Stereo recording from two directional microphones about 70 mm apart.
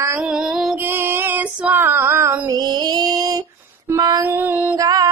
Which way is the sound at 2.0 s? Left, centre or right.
Right.